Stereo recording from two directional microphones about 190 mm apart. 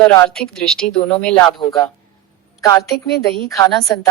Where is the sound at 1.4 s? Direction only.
20° left (ahead or behind).